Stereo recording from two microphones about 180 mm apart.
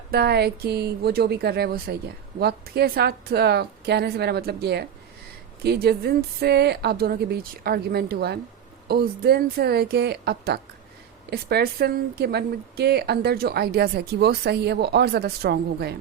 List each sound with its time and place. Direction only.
0.1 s speech: 65° right (ahead or behind)